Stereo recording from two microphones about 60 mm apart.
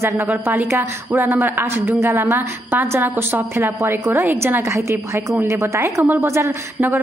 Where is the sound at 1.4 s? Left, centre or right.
Right.